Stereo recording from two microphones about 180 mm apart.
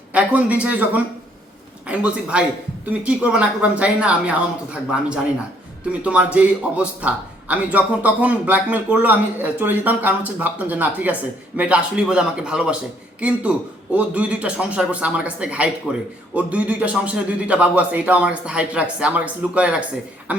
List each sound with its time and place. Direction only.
0.1 s a man's voice: 5° right (ahead or behind)